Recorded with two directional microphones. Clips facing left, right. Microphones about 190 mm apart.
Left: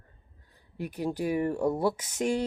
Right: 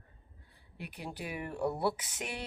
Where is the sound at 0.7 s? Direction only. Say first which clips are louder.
Left 11 dB; 40° left (ahead or behind).